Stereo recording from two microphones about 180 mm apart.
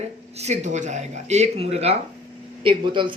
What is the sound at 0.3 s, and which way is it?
Speech, 40° right (ahead or behind).